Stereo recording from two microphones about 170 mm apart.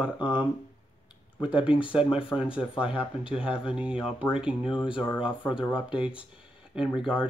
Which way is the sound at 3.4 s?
5° right (ahead or behind).